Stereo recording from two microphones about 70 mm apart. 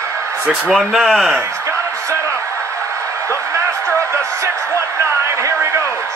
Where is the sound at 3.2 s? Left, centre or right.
Right.